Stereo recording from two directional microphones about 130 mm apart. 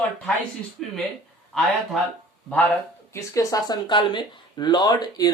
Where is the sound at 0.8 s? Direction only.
Centre (ahead or behind).